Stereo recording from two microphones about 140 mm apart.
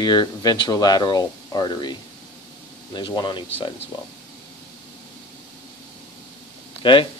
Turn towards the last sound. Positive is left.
turn(degrees=35)  # may be behind; listen again after turning